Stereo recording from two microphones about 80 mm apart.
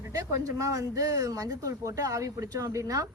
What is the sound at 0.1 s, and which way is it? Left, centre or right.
Speech, right.